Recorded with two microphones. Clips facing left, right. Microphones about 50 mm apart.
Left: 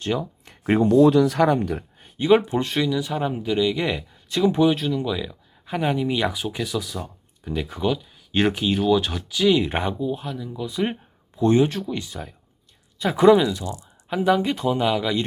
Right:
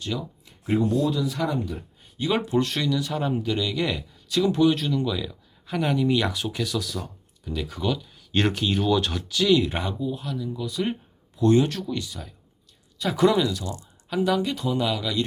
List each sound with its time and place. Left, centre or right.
0.0 s speech: left
0.4 s speech: left
2.1 s speech: left
4.8 s speech: centre
7.4 s speech: left
7.9 s speech: centre
9.6 s speech: left
12.0 s speech: left